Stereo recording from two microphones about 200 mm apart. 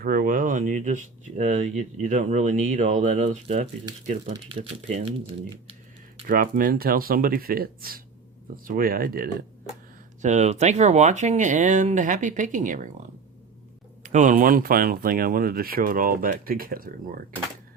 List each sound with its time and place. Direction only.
0.0 s speech: 45° right (ahead or behind)
6.2 s speech: 45° right (ahead or behind)
10.2 s speech: 35° right (ahead or behind)
14.0 s speech: 35° right (ahead or behind)